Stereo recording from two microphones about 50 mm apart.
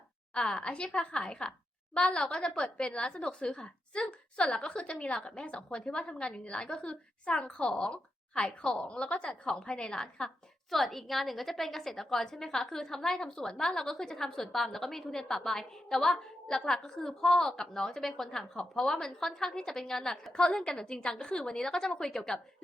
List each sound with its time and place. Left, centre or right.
0.3 s a woman's voice: centre
10.7 s a woman's voice: centre